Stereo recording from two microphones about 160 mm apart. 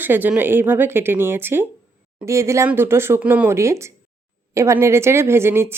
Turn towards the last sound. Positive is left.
turn(degrees=-15)  # may be behind; listen again after turning